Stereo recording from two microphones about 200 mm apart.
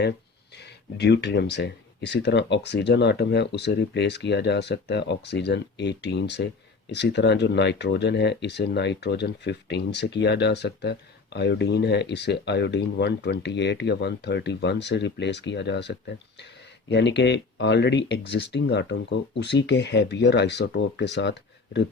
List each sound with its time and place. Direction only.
0.9 s speech: 55° left (ahead or behind)